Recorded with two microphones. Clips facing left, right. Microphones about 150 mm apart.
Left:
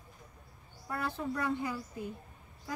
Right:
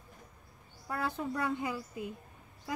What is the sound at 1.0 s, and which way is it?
Speech, 20° right (ahead or behind).